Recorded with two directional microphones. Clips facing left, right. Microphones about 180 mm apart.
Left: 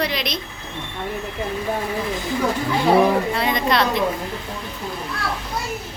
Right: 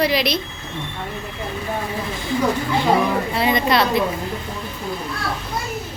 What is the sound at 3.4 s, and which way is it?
Speech, 5° right (ahead or behind).